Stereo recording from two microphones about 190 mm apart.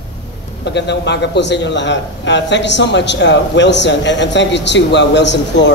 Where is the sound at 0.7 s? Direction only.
65° left (ahead or behind).